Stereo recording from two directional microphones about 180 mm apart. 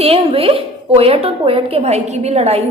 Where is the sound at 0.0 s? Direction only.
30° right (ahead or behind).